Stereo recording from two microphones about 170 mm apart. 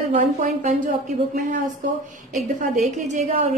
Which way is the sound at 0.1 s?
45° right (ahead or behind).